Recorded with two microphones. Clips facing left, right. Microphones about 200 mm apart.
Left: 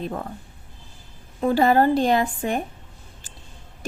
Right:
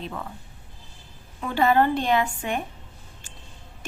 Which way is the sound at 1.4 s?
40° left (ahead or behind).